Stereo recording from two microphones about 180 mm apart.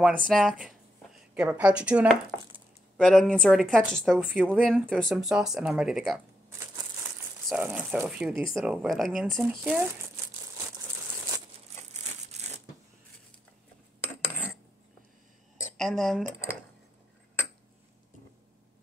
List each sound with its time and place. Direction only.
0.3 s a woman's voice: centre (ahead or behind)
4.2 s speech: 5° right (ahead or behind)
4.5 s speech: 5° left (ahead or behind)
11.9 s a sound: 40° right (ahead or behind)
14.0 s cutlery: 10° left (ahead or behind)
15.8 s speech: centre (ahead or behind)